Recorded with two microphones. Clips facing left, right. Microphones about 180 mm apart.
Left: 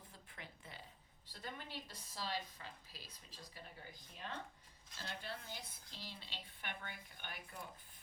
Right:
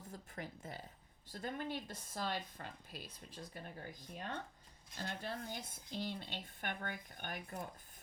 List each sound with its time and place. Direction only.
0.1 s a sound: 45° right (ahead or behind)
1.3 s speech: 50° right (ahead or behind)
4.9 s speech: 40° right (ahead or behind)